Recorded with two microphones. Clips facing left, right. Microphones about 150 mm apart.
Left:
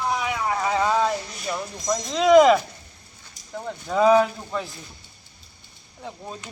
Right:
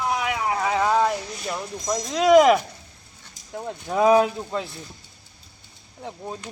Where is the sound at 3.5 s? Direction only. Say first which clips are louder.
Even; 15° right (ahead or behind).